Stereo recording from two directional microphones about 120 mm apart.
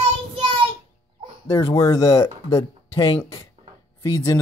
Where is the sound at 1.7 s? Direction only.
30° left (ahead or behind).